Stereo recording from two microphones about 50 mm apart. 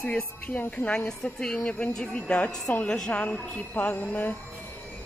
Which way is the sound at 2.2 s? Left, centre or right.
Left.